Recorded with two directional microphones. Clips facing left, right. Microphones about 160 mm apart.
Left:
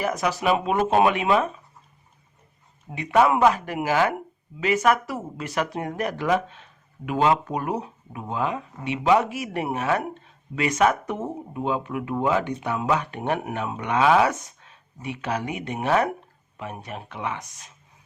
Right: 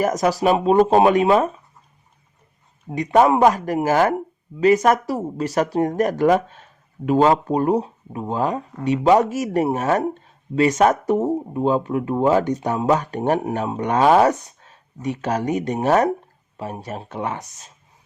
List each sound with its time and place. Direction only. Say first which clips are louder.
0.0 s speech: right 6 dB; 40° right (ahead or behind)
2.9 s speech: right 4 dB; 40° right (ahead or behind)